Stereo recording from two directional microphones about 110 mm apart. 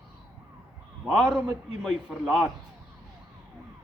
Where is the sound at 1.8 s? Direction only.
Centre (ahead or behind).